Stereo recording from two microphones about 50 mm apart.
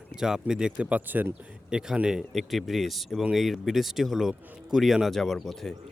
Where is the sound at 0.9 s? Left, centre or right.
Right.